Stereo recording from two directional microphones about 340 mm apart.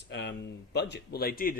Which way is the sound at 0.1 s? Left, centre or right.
Left.